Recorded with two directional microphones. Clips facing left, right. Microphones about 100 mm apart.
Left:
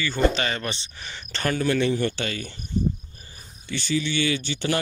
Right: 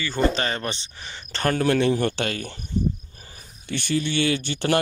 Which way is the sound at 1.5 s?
65° right (ahead or behind).